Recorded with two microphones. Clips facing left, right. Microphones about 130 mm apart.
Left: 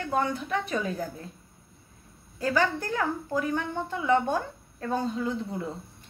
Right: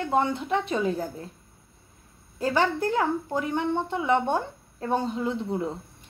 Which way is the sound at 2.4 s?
25° right (ahead or behind).